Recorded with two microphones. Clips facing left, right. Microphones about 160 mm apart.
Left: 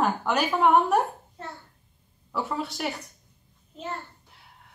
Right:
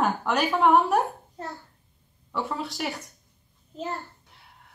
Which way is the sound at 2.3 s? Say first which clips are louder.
Even; centre (ahead or behind).